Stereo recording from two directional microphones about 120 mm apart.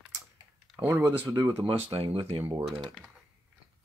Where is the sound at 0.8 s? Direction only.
20° right (ahead or behind).